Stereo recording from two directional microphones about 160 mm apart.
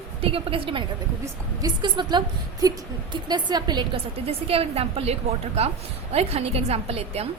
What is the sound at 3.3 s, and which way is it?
A woman's voice, 25° right (ahead or behind).